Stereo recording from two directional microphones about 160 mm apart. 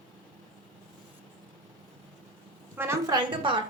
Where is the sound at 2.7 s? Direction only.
15° right (ahead or behind).